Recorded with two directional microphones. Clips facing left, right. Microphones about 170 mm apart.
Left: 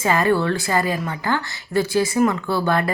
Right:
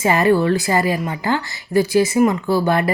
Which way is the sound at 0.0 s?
20° right (ahead or behind).